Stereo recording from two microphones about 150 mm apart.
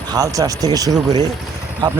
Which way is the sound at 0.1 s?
25° right (ahead or behind).